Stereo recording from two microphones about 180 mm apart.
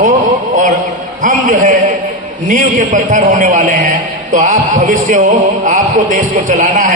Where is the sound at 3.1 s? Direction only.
45° right (ahead or behind).